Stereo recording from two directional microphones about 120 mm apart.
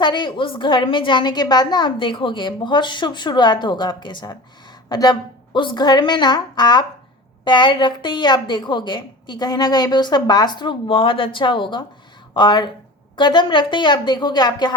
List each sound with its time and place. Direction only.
0.0 s a woman's voice: 40° left (ahead or behind)